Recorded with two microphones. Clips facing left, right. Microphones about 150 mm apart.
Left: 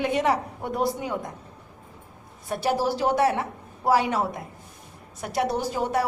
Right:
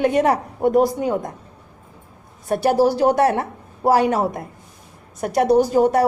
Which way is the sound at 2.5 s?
50° right (ahead or behind).